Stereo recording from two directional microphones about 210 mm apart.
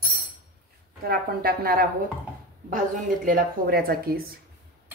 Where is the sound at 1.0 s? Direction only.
45° right (ahead or behind).